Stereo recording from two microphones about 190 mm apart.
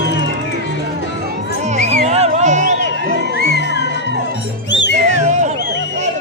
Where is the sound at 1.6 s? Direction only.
35° right (ahead or behind).